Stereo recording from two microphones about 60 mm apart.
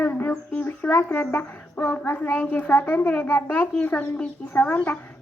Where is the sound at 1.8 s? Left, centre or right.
Left.